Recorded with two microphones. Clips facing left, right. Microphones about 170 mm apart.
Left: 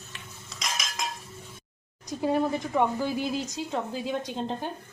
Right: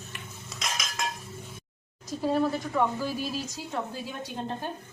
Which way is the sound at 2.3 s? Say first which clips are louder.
Even; 15° left (ahead or behind).